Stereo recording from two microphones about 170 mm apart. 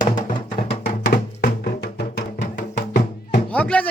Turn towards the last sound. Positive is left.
turn(degrees=10)  # may be behind; listen again after turning